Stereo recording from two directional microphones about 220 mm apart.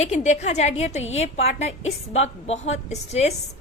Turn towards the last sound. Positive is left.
turn(degrees=30)  # may be behind; listen again after turning